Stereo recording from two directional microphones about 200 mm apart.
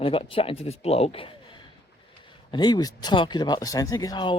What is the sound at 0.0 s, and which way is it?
Speech, 25° left (ahead or behind).